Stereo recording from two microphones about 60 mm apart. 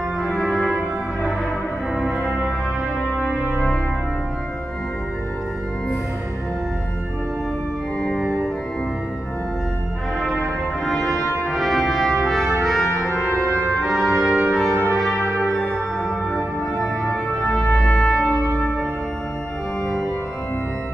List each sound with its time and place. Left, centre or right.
0.2 s brass instrument: centre
8.0 s organ: centre
10.9 s brass instrument: centre
13.3 s music: right
13.7 s brass instrument: centre
16.3 s music: centre
17.4 s brass instrument: centre